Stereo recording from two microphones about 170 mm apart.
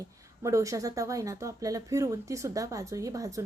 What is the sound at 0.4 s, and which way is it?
A woman's voice, 20° right (ahead or behind).